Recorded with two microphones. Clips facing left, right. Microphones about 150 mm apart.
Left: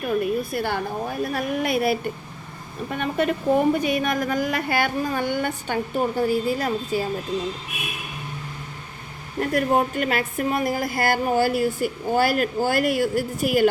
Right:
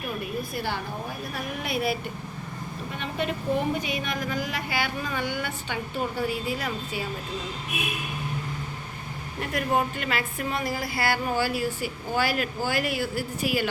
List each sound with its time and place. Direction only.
0.5 s a woman's voice: 55° left (ahead or behind)
9.4 s a woman's voice: 40° left (ahead or behind)